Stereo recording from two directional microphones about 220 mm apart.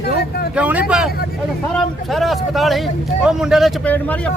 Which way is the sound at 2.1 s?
Centre (ahead or behind).